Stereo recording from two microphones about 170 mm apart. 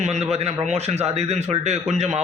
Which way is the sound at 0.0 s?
40° right (ahead or behind).